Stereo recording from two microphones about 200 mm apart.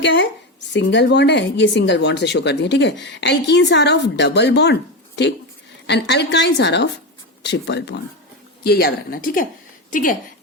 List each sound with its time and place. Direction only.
0.0 s a woman's voice: 60° left (ahead or behind); by 10.2 s 40° left (ahead or behind)